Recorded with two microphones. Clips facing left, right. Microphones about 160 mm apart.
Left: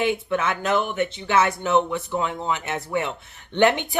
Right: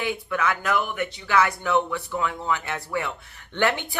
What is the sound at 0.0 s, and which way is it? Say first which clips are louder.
Speech: left 3 dB; 25° left (ahead or behind).